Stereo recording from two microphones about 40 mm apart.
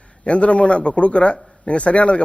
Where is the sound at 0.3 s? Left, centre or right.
Left.